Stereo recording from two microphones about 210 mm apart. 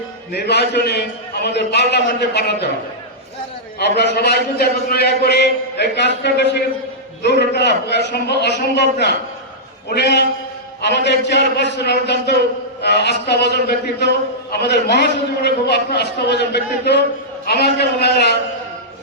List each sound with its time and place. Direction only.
0.3 s a man's voice: 50° left (ahead or behind)
3.8 s a man's voice: 55° left (ahead or behind)